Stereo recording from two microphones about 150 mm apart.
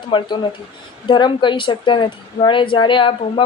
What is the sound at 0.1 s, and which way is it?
A woman's voice, 30° left (ahead or behind).